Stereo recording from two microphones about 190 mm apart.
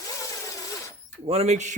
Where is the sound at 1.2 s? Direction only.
35° right (ahead or behind).